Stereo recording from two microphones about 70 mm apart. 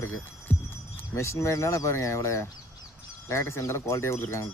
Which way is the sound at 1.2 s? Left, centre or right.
Left.